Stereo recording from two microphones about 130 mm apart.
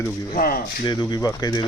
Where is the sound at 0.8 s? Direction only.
35° left (ahead or behind).